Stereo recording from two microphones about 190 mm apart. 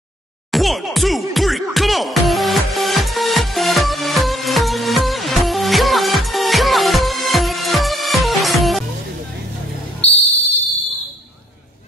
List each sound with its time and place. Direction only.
0.5 s music: centre (ahead or behind)
10.0 s music: 30° left (ahead or behind)